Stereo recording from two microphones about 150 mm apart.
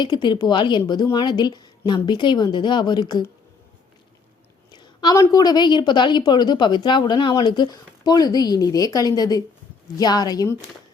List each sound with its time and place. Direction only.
0.0 s a woman's voice: 30° left (ahead or behind)
4.7 s a sound: 30° left (ahead or behind)
5.3 s a woman's voice: 25° left (ahead or behind)